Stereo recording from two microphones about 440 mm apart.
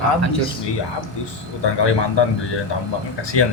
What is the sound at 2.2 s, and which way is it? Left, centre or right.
Speech, left.